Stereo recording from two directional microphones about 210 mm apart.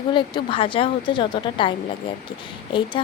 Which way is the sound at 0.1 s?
20° left (ahead or behind).